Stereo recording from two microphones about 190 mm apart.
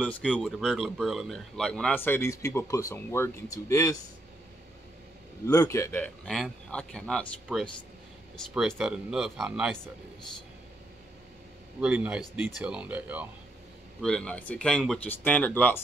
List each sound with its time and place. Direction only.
0.0 s speech: 5° left (ahead or behind)
5.5 s speech: 15° left (ahead or behind)
8.5 s speech: centre (ahead or behind)
11.8 s speech: 5° right (ahead or behind)
14.0 s speech: 5° left (ahead or behind)